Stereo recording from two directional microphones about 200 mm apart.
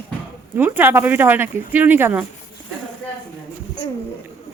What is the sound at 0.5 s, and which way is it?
Speech, 10° right (ahead or behind).